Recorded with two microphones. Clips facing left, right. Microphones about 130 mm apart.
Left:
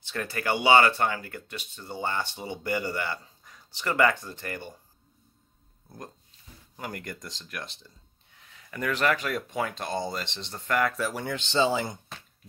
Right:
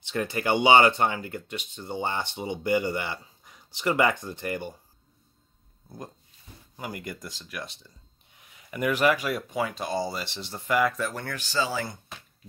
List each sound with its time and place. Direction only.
0.0 s speech: 20° right (ahead or behind)
6.8 s speech: 5° right (ahead or behind)
8.4 s speech: 15° right (ahead or behind); by 11.2 s 5° left (ahead or behind)
11.2 s speech: 20° left (ahead or behind)